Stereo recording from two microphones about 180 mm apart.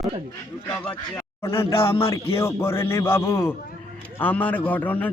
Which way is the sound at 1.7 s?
30° left (ahead or behind).